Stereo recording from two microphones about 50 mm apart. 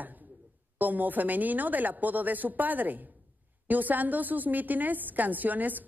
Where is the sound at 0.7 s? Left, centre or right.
Right.